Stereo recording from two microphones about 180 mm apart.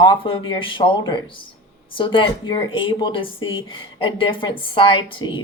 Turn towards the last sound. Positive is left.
turn(degrees=25)  # may be behind; listen again after turning